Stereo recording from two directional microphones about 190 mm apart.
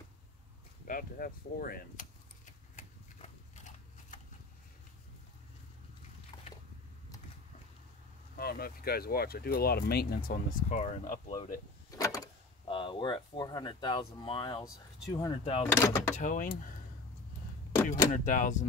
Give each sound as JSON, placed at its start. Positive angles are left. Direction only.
{"t": 0.8, "sound": "keys jangling", "side_deg": 45}
{"t": 6.3, "sound": "a sound", "side_deg": 20}
{"t": 8.4, "sound": "speech", "side_deg": 55}
{"t": 12.0, "sound": "speech", "side_deg": 20}
{"t": 15.6, "sound": "speech", "side_deg": 15}
{"t": 16.2, "sound": "speech", "side_deg": 45}
{"t": 18.1, "sound": "speech", "side_deg": 40}